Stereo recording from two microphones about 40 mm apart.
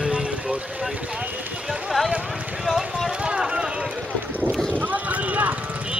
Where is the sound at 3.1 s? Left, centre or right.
Right.